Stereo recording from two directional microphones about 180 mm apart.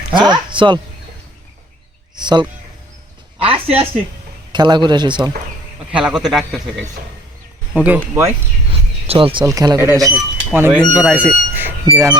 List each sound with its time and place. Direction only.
0.1 s speech: 25° right (ahead or behind)
2.2 s a man's voice: 25° right (ahead or behind)
6.0 s a man's voice: 5° right (ahead or behind)
9.0 s a man's voice: 30° right (ahead or behind)
9.5 s speech: 15° right (ahead or behind)
10.8 s speech: centre (ahead or behind)